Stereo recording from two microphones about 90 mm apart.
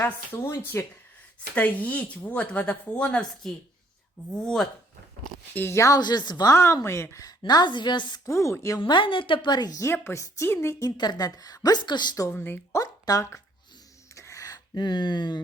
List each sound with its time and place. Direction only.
0.0 s a woman's voice: 25° left (ahead or behind); by 4.7 s centre (ahead or behind)
5.5 s speech: 30° left (ahead or behind)
6.0 s a woman's voice: 50° left (ahead or behind); by 7.3 s 30° left (ahead or behind)
7.3 s a woman's voice: 50° left (ahead or behind)
8.2 s speech: 35° left (ahead or behind)
8.8 s a woman's voice: 70° left (ahead or behind); by 9.8 s 50° left (ahead or behind)
9.8 s a woman's voice: 30° left (ahead or behind)
10.8 s a woman's voice: 50° left (ahead or behind)
12.3 s a woman's voice: 25° left (ahead or behind)
12.8 s speech: 40° left (ahead or behind)
14.2 s a sound: 35° left (ahead or behind); by 15.4 s 55° left (ahead or behind)